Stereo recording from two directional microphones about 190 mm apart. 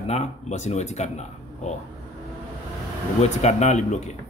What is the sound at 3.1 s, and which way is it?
Speech, 35° left (ahead or behind).